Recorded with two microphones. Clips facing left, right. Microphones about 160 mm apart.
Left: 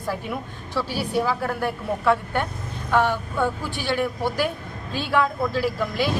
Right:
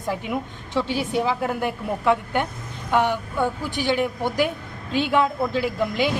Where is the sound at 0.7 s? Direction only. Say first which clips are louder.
Right 2 dB; 20° right (ahead or behind).